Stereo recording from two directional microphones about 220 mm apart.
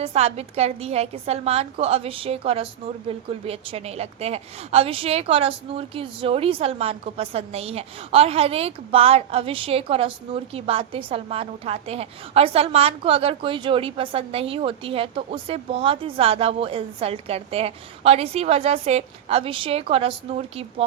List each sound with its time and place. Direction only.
0.0 s a woman's voice: 30° right (ahead or behind)